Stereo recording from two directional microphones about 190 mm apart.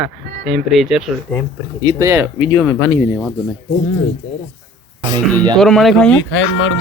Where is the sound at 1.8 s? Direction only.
20° right (ahead or behind).